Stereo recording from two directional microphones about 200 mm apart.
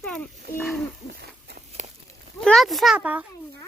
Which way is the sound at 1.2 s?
55° right (ahead or behind).